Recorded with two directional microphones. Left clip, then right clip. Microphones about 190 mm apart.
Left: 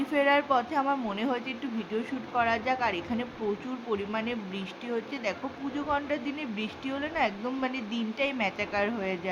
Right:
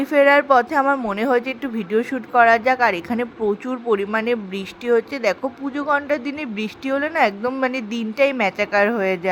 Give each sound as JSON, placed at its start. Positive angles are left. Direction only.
{"t": 0.0, "sound": "speech", "side_deg": -40}